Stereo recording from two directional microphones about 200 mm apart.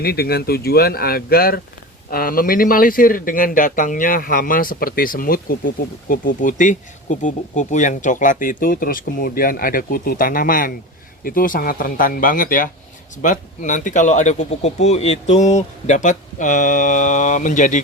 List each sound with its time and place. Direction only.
0.0 s speech: 50° left (ahead or behind)